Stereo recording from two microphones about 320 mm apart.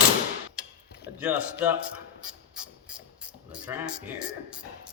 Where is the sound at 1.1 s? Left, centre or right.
Centre.